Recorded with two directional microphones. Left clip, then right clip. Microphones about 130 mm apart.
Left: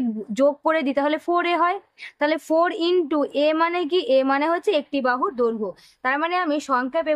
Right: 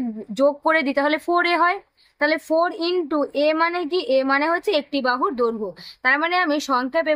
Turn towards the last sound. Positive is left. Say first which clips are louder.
# right 1 dB
turn(degrees=5)  # may be behind; listen again after turning